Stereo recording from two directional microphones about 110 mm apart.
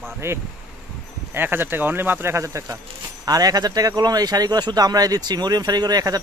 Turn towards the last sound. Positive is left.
turn(degrees=-35)  # may be behind; listen again after turning